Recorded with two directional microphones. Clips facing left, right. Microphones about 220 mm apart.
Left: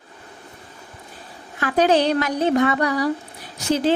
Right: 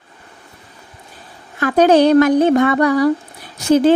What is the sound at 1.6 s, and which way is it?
Speech, 45° right (ahead or behind).